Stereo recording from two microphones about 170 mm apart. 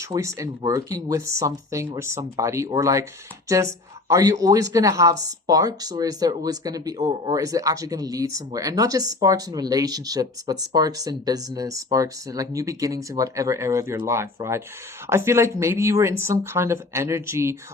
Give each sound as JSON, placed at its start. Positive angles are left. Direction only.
{"t": 0.0, "sound": "speech", "side_deg": -15}